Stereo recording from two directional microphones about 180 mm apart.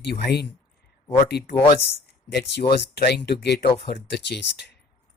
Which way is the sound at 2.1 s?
65° left (ahead or behind).